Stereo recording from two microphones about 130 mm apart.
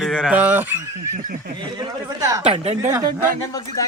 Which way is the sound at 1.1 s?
90° right.